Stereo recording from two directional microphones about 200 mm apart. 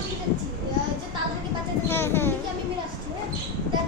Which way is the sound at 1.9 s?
10° left (ahead or behind).